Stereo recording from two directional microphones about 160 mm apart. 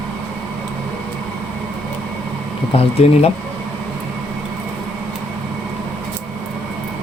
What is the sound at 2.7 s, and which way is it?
Speech, 40° left (ahead or behind).